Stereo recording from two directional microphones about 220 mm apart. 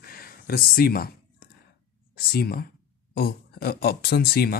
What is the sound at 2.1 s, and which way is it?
Speech, 45° left (ahead or behind).